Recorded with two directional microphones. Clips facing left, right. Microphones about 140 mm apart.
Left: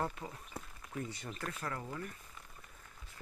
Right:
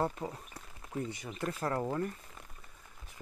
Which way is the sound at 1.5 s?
40° right (ahead or behind).